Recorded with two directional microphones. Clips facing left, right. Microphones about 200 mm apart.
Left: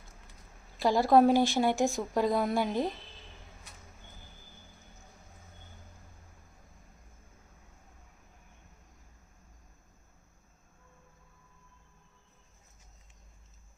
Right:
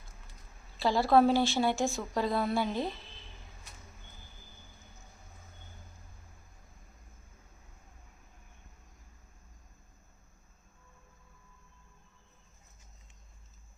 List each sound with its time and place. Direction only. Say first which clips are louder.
0.8 s speech: left 2 dB; 15° left (ahead or behind)